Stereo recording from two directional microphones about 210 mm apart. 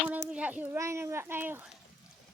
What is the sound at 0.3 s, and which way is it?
Speech, 5° right (ahead or behind).